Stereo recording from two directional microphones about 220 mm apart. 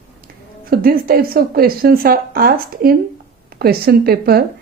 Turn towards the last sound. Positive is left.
turn(degrees=-45)  # may be behind; listen again after turning